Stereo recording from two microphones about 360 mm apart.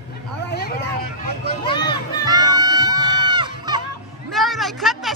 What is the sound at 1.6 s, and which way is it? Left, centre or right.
Speech, centre.